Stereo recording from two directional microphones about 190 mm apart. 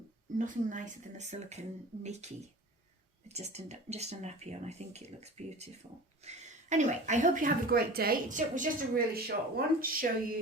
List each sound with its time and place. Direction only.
0.3 s speech: 40° right (ahead or behind)